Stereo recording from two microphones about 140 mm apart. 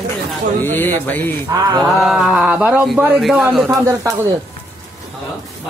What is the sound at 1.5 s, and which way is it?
Speech, 25° right (ahead or behind).